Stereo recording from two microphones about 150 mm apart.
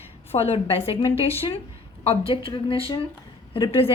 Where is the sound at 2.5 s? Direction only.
35° left (ahead or behind).